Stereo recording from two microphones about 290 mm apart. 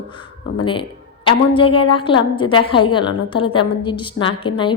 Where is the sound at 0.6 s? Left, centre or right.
Centre.